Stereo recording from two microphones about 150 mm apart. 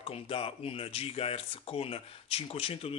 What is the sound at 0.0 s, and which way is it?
Speech, 40° left (ahead or behind).